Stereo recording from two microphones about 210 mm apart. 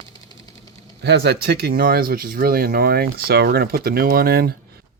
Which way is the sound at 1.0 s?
50° right (ahead or behind).